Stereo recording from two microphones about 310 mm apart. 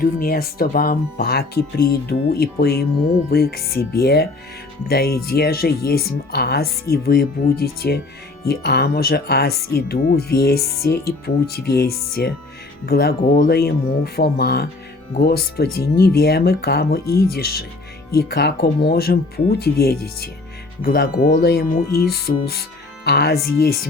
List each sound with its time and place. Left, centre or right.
0.0 s speech: left